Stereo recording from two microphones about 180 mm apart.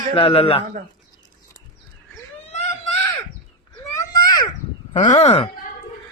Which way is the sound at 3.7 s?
20° left (ahead or behind).